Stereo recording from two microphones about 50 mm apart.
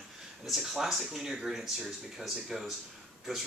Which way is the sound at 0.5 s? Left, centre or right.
Centre.